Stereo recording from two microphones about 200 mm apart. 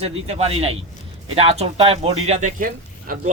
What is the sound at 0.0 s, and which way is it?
Speech, 30° right (ahead or behind).